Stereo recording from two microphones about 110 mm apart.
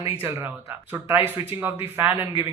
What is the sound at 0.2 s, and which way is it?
Speech, 20° right (ahead or behind).